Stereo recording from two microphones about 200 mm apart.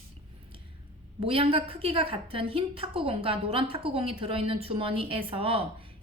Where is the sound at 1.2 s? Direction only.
30° right (ahead or behind).